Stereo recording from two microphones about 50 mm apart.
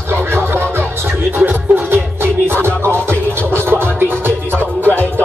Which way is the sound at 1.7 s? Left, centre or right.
Right.